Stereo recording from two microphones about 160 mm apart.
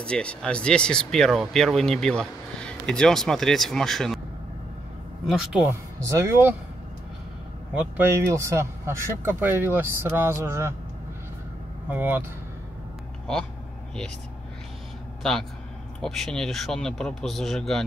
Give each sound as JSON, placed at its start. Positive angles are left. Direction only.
{"t": 0.0, "sound": "speech", "side_deg": 5}
{"t": 5.2, "sound": "speech", "side_deg": -5}
{"t": 5.7, "sound": "speech", "side_deg": -20}
{"t": 7.7, "sound": "speech", "side_deg": -15}
{"t": 11.9, "sound": "speech", "side_deg": -10}
{"t": 16.0, "sound": "speech", "side_deg": 5}